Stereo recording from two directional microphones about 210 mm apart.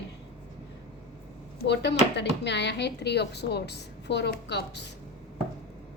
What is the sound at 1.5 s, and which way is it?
Speech, 55° left (ahead or behind).